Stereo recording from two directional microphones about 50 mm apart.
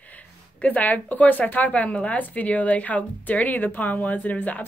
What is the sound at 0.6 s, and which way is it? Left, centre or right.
A woman's voice, left.